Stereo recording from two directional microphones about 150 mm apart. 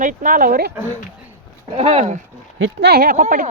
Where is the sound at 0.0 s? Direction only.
60° right (ahead or behind); by 0.7 s 75° right (ahead or behind).